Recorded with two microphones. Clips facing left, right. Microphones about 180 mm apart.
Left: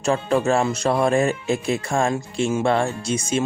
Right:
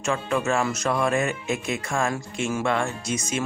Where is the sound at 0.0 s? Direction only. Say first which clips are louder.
Left 5 dB; 35° left (ahead or behind).